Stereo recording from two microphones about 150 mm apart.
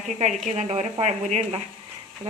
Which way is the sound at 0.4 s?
50° right (ahead or behind).